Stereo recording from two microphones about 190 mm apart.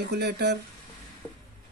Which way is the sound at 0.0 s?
60° right (ahead or behind).